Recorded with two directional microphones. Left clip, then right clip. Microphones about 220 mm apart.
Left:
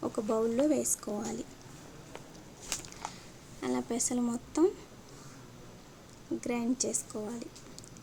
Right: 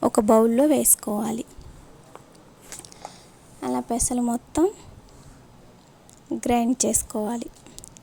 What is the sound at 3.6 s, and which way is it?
Speech, 25° right (ahead or behind).